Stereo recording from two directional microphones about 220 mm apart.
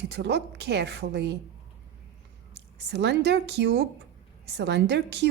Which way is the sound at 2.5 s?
50° right (ahead or behind).